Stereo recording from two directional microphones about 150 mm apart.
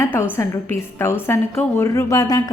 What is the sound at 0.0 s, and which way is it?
A woman's voice, 20° left (ahead or behind).